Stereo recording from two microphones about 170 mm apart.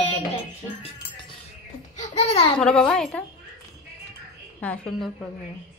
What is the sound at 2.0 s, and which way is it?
Babbling, 40° left (ahead or behind).